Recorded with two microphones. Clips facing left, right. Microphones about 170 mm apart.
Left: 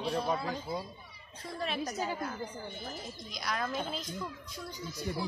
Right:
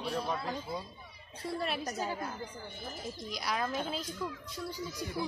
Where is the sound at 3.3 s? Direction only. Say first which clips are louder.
Right 1 dB; 5° right (ahead or behind).